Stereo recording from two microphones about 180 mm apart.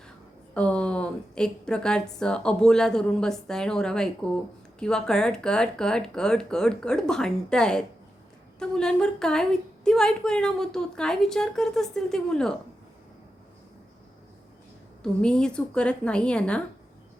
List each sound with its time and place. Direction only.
0.5 s a woman's voice: 5° left (ahead or behind)
15.0 s a woman's voice: 5° left (ahead or behind)